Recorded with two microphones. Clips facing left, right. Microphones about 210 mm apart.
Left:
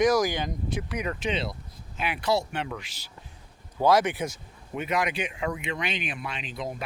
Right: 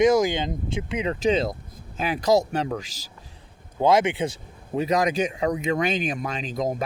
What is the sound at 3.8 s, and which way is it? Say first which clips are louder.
Speech: right 3 dB; 25° right (ahead or behind).